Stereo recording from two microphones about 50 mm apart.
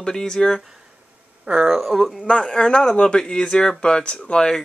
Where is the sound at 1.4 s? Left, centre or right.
Centre.